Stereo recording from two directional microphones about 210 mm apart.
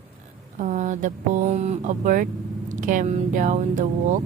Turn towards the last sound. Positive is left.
turn(degrees=-35)  # may be behind; listen again after turning